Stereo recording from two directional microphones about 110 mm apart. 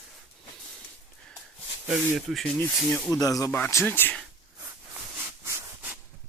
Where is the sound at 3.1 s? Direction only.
30° left (ahead or behind); by 4.2 s 15° left (ahead or behind).